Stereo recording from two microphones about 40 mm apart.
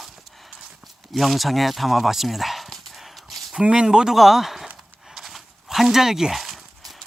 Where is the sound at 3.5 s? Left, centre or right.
Right.